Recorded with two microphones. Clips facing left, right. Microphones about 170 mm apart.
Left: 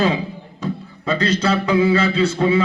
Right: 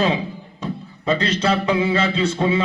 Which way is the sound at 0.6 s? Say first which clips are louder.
Left 3 dB; 25° right (ahead or behind).